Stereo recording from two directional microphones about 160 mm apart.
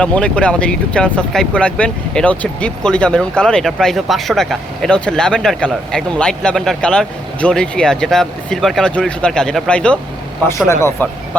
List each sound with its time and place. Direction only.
0.0 s speech: 5° left (ahead or behind)
10.7 s speech: 15° left (ahead or behind)